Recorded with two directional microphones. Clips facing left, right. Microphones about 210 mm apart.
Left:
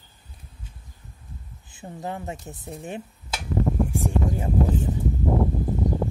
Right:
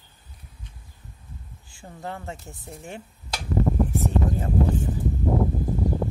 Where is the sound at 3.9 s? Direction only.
15° left (ahead or behind).